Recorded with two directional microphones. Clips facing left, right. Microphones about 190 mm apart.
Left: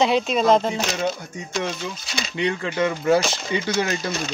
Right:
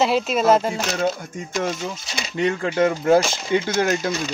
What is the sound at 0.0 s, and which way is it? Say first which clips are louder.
Speech: even; 5° right (ahead or behind).